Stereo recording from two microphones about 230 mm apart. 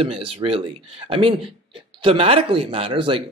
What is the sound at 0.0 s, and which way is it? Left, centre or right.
Speech, right.